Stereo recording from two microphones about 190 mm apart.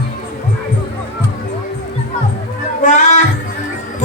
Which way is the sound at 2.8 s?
40° left (ahead or behind).